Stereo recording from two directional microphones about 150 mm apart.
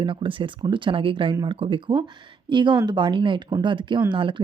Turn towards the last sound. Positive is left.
turn(degrees=-35)  # may be behind; listen again after turning